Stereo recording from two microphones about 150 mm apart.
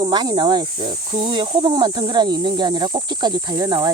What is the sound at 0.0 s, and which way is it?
Speech, 30° right (ahead or behind).